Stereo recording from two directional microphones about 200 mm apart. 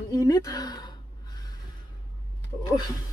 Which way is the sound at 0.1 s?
15° left (ahead or behind).